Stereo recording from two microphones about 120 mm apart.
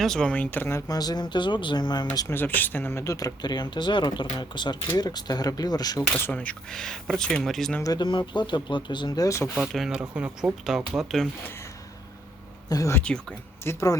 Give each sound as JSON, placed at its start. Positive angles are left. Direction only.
{"t": 0.0, "sound": "speech", "side_deg": 5}
{"t": 2.2, "sound": "speech", "side_deg": 15}
{"t": 6.1, "sound": "speech", "side_deg": 15}
{"t": 7.9, "sound": "speech", "side_deg": 40}
{"t": 9.6, "sound": "speech", "side_deg": 0}
{"t": 12.6, "sound": "speech", "side_deg": 30}
{"t": 12.9, "sound": "speech", "side_deg": 10}
{"t": 13.7, "sound": "speech", "side_deg": 25}